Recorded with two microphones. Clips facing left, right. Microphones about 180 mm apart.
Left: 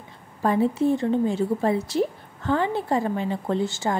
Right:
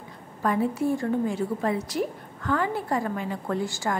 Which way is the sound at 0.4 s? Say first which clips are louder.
Left 4 dB; 25° left (ahead or behind).